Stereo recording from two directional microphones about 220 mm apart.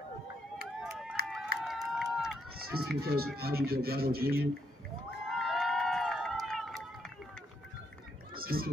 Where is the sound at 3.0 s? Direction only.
45° right (ahead or behind).